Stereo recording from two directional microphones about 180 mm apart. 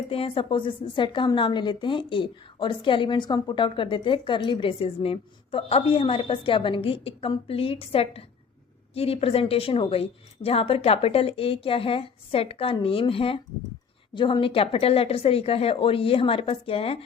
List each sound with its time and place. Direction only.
0.1 s a woman's voice: 30° left (ahead or behind)